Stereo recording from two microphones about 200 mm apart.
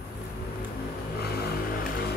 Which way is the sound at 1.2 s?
50° left (ahead or behind).